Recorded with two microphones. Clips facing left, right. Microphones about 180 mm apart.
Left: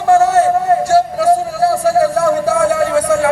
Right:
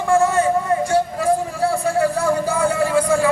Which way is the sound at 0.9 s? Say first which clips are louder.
Left 7 dB; 75° left (ahead or behind).